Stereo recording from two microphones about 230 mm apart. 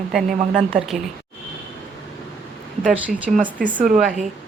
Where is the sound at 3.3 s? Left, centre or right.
Centre.